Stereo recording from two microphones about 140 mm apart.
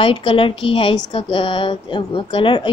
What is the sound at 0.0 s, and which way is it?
A woman's voice, 40° left (ahead or behind).